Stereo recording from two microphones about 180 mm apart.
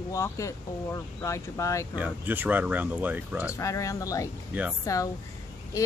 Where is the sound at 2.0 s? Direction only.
10° right (ahead or behind).